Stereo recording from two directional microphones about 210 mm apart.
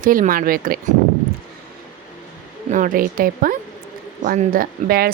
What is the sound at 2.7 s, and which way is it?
A woman's voice, 40° right (ahead or behind).